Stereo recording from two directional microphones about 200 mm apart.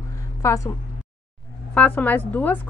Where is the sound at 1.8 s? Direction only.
10° left (ahead or behind).